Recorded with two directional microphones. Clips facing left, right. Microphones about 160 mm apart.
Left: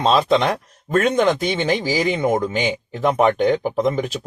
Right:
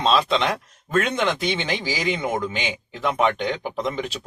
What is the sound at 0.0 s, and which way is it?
Speech, 45° left (ahead or behind).